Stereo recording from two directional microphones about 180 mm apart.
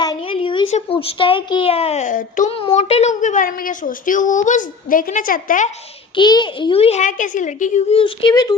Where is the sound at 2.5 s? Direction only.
30° left (ahead or behind).